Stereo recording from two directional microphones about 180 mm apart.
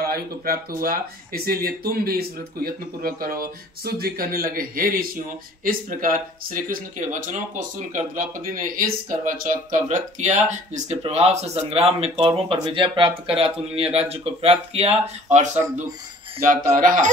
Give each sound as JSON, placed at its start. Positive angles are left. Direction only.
{"t": 0.0, "sound": "speech", "side_deg": -55}